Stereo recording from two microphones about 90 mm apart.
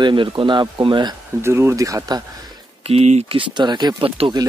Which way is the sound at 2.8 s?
90° right.